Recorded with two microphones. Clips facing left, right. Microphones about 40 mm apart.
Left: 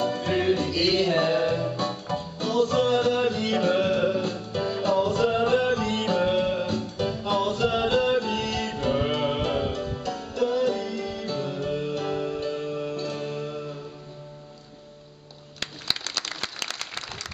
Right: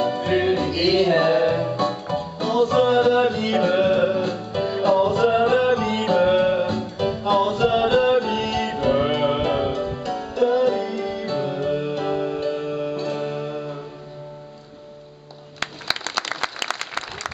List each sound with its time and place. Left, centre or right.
0.0 s music: centre
16.2 s a sound: right
16.6 s applause: right